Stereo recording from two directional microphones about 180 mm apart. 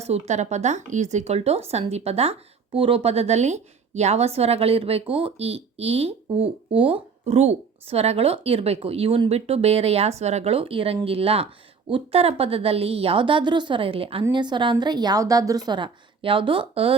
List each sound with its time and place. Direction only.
0.0 s a woman's voice: 40° right (ahead or behind)